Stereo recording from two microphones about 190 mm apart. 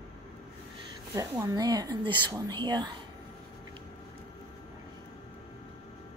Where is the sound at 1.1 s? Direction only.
15° right (ahead or behind).